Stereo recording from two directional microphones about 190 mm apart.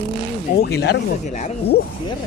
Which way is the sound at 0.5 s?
60° left (ahead or behind).